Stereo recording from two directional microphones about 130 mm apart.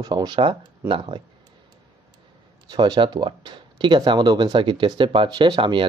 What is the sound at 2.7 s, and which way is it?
Speech, 35° right (ahead or behind).